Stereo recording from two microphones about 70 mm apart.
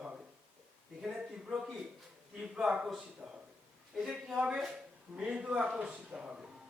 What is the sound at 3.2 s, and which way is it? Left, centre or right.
Speech, right.